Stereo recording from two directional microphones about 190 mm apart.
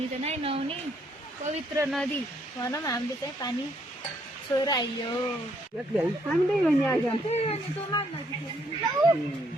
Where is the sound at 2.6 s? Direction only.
15° left (ahead or behind).